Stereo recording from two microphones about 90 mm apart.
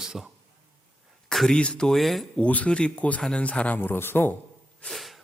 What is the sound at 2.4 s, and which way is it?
Speech, 15° left (ahead or behind).